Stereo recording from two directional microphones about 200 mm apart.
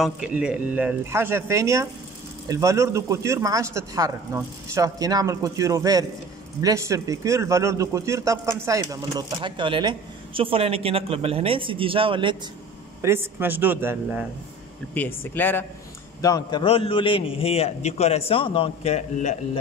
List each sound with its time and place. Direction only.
0.0 s speech: 5° right (ahead or behind); by 12.4 s 25° right (ahead or behind)
13.0 s speech: 10° right (ahead or behind)
15.0 s a man's voice: 10° left (ahead or behind); by 19.6 s 35° left (ahead or behind)